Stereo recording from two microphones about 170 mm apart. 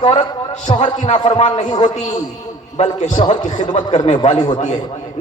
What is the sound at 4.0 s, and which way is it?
Speech, 30° left (ahead or behind).